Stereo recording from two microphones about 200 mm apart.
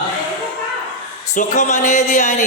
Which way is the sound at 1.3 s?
35° left (ahead or behind).